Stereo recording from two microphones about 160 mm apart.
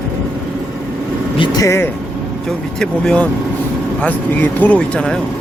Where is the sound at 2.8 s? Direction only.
5° left (ahead or behind).